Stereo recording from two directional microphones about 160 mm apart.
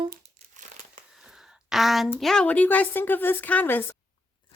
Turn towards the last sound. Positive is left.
turn(degrees=10)  # may be behind; listen again after turning